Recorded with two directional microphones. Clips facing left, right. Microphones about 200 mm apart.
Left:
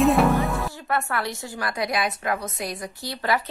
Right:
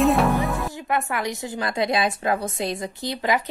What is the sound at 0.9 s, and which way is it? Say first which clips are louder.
A woman's voice: right 1 dB; 20° right (ahead or behind).